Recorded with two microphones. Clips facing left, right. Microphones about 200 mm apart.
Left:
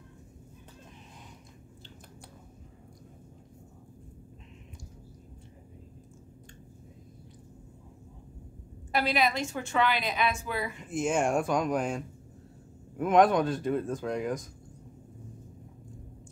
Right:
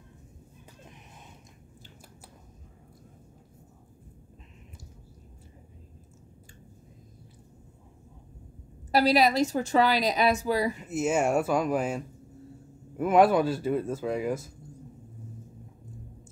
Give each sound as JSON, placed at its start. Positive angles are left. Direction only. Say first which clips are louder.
{"t": 8.9, "sound": "a woman's voice", "louder": "right 6 dB", "side_deg": -40}
{"t": 10.8, "sound": "speech", "louder": "right 2 dB", "side_deg": -5}